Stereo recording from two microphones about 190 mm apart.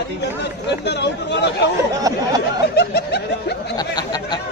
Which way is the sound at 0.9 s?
65° left (ahead or behind).